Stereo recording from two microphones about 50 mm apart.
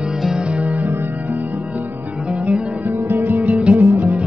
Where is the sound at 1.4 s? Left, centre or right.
Right.